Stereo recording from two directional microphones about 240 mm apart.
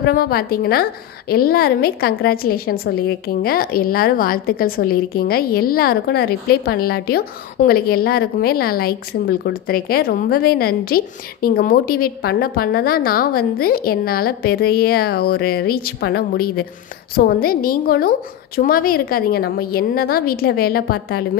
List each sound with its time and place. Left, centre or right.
0.0 s a woman's voice: left